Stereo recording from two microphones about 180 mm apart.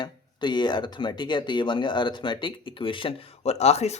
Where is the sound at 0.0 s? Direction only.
25° left (ahead or behind).